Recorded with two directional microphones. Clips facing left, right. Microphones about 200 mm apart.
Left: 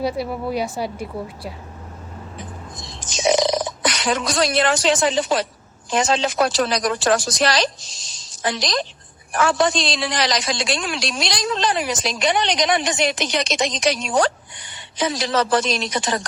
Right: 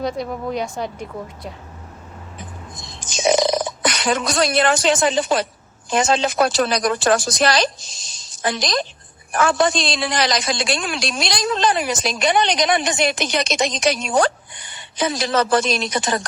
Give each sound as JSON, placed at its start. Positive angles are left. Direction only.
{"t": 0.0, "sound": "a woman's voice", "side_deg": 5}
{"t": 3.0, "sound": "a man's voice", "side_deg": -50}